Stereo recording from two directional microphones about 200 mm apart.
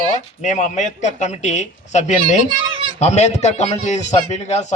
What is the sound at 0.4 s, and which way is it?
A man's voice, 35° left (ahead or behind).